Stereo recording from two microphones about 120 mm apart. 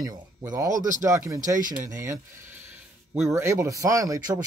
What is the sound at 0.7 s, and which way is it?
Speech, 90° right.